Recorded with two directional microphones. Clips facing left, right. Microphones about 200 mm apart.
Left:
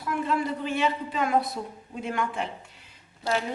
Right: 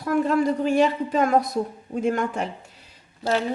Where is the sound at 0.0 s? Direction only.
45° right (ahead or behind).